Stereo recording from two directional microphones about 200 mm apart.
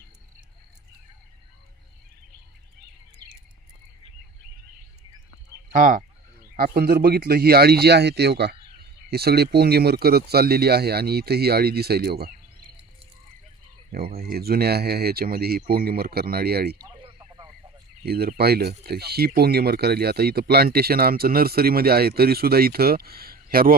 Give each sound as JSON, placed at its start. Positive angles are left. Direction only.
{"t": 5.7, "sound": "speech", "side_deg": -40}
{"t": 14.2, "sound": "speech", "side_deg": -50}
{"t": 16.8, "sound": "a sound", "side_deg": -25}
{"t": 18.0, "sound": "speech", "side_deg": -50}